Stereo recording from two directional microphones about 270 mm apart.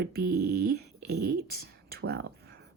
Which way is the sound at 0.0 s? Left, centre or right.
Right.